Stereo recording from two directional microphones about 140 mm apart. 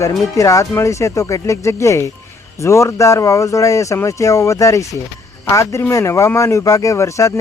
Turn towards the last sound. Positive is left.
turn(degrees=20)  # may be behind; listen again after turning